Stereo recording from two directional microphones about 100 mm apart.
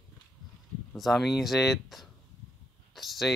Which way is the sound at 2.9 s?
Centre (ahead or behind).